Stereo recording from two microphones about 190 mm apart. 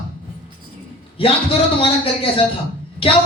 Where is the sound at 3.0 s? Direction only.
30° left (ahead or behind).